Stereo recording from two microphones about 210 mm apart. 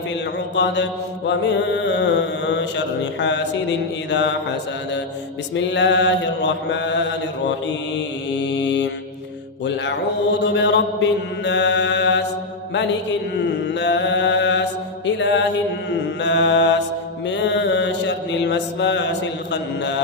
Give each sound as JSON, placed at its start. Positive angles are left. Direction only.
{"t": 0.5, "sound": "mantra", "side_deg": 55}
{"t": 5.5, "sound": "mantra", "side_deg": 55}
{"t": 10.4, "sound": "mantra", "side_deg": 55}